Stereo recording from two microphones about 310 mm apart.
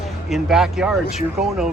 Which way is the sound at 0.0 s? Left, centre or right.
Centre.